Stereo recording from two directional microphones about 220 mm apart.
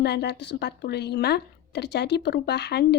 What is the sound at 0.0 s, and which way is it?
A woman's voice, 50° left (ahead or behind).